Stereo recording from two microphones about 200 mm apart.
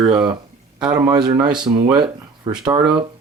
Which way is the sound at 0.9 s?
20° right (ahead or behind).